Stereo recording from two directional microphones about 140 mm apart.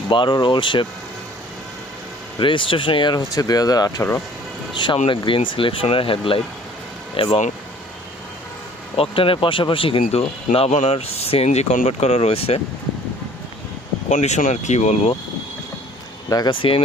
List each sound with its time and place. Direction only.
0.1 s speech: 35° left (ahead or behind)
2.4 s speech: 35° left (ahead or behind); by 4.2 s 20° left (ahead or behind)
4.7 s speech: 35° left (ahead or behind)
9.0 s speech: 40° left (ahead or behind)
14.1 s speech: 55° left (ahead or behind)
16.3 s speech: 25° left (ahead or behind)
16.6 s speech: 40° left (ahead or behind)